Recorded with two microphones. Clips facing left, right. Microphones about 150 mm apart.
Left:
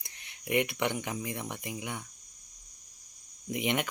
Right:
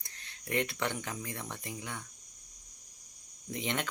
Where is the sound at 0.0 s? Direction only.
15° left (ahead or behind).